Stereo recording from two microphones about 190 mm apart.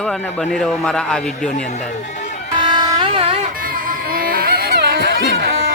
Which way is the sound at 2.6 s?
25° right (ahead or behind).